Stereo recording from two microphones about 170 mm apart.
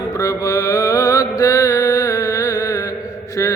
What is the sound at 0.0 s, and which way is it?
Mantra, 20° left (ahead or behind).